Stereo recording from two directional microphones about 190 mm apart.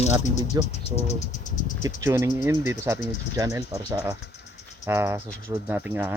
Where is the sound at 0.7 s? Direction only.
35° left (ahead or behind).